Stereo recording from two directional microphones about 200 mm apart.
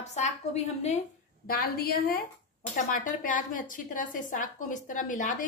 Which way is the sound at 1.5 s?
50° left (ahead or behind).